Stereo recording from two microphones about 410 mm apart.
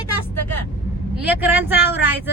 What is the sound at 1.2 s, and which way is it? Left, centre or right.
Speech, centre.